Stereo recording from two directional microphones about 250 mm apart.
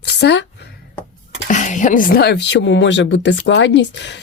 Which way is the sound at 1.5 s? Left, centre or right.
Left.